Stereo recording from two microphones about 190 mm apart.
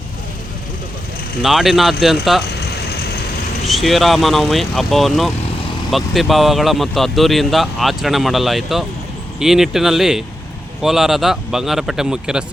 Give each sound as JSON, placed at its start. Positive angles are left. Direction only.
{"t": 1.4, "sound": "speech", "side_deg": 0}
{"t": 3.7, "sound": "speech", "side_deg": 0}